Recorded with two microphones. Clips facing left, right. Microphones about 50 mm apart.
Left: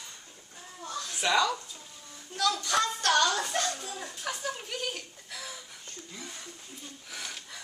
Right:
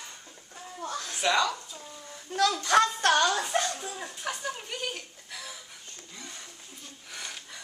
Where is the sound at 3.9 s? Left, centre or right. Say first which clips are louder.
Right 1 dB; centre.